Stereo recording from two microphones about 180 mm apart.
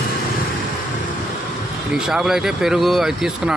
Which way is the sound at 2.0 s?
5° right (ahead or behind).